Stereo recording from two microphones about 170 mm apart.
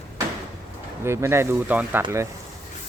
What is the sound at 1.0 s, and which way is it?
Speech, 15° right (ahead or behind).